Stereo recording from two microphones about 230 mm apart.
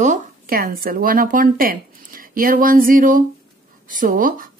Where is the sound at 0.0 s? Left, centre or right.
Right.